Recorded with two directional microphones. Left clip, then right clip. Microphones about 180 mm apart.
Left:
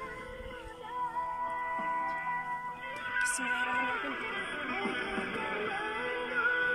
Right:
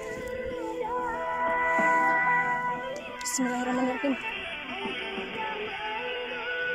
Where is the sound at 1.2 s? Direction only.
65° right (ahead or behind).